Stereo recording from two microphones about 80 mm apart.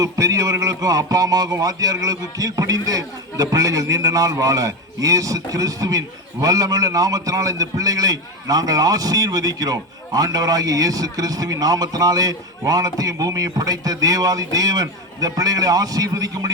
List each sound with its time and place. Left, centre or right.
0.0 s a man's voice: right